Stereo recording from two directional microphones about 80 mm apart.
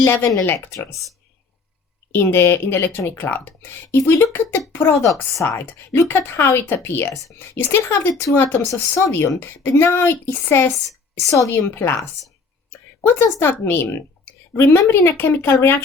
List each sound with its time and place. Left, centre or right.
0.0 s a woman's voice: left
2.3 s a woman's voice: left
11.2 s a woman's voice: left